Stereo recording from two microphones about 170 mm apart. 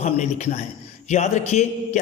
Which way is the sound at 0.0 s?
45° left (ahead or behind).